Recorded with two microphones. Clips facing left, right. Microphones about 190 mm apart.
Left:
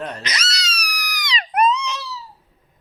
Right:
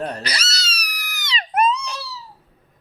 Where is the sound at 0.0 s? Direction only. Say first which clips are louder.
Right 2 dB; 35° right (ahead or behind).